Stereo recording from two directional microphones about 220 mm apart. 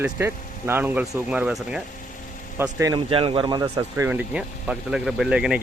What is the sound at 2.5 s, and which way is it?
Speech, 15° right (ahead or behind).